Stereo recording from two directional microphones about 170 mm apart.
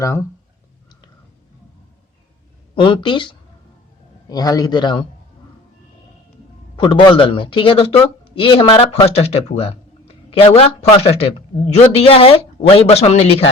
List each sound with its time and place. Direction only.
0.0 s speech: 15° left (ahead or behind)
2.7 s a man's voice: 30° left (ahead or behind)
6.7 s speech: 30° left (ahead or behind)